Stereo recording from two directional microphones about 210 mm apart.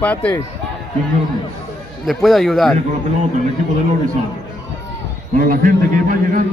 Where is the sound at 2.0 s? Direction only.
Centre (ahead or behind).